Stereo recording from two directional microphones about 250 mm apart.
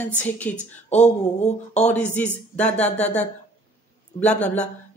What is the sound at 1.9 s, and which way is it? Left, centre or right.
Speech, centre.